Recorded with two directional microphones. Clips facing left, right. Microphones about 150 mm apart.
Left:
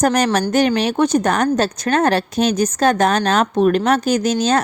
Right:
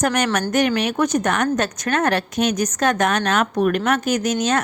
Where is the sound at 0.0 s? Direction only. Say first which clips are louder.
Left 4 dB; 35° left (ahead or behind).